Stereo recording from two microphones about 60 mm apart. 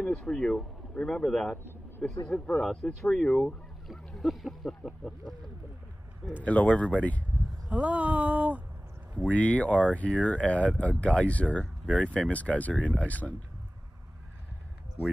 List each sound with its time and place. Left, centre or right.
0.0 s speech: centre
3.8 s speech: centre
6.4 s speech: left
7.8 s speech: right
9.2 s speech: left